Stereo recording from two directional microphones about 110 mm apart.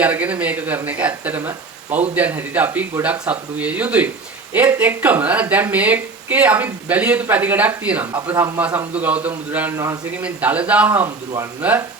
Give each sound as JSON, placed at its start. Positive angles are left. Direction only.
{"t": 0.0, "sound": "speech", "side_deg": -15}